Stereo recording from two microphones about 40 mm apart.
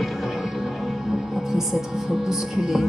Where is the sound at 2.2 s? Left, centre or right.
Centre.